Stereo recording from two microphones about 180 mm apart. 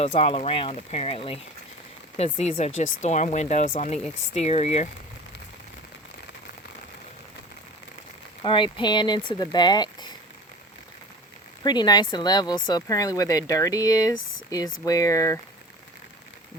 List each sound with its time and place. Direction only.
0.0 s speech: 35° left (ahead or behind)
8.4 s speech: 30° left (ahead or behind)
11.6 s speech: 25° left (ahead or behind)